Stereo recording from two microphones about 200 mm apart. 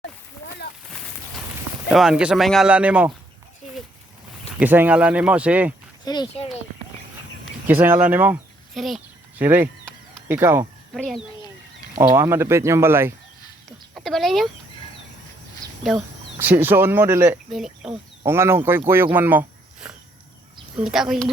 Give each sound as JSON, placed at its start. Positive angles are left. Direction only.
{"t": 1.9, "sound": "speech", "side_deg": -5}
{"t": 4.6, "sound": "speech", "side_deg": -10}
{"t": 6.1, "sound": "speech", "side_deg": 25}
{"t": 7.7, "sound": "speech", "side_deg": -10}
{"t": 9.4, "sound": "speech", "side_deg": -10}
{"t": 10.9, "sound": "speech", "side_deg": 0}
{"t": 11.9, "sound": "speech", "side_deg": -10}
{"t": 13.7, "sound": "chicken", "side_deg": 0}
{"t": 16.4, "sound": "speech", "side_deg": -10}
{"t": 17.5, "sound": "speech", "side_deg": 0}
{"t": 18.3, "sound": "speech", "side_deg": -10}